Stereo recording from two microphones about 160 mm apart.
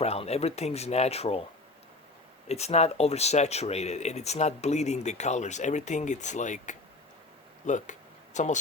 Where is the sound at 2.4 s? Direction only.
40° left (ahead or behind).